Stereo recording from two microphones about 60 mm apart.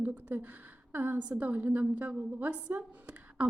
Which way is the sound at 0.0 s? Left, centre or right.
Right.